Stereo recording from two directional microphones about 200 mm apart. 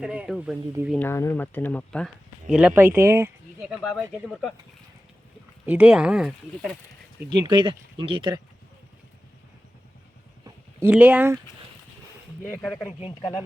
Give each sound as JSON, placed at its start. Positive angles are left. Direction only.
{"t": 0.0, "sound": "speech", "side_deg": -5}
{"t": 0.9, "sound": "speech", "side_deg": 10}
{"t": 5.6, "sound": "speech", "side_deg": -10}
{"t": 7.3, "sound": "speech", "side_deg": -20}
{"t": 10.4, "sound": "a sound", "side_deg": -10}
{"t": 12.6, "sound": "speech", "side_deg": 5}
{"t": 12.9, "sound": "speech", "side_deg": 30}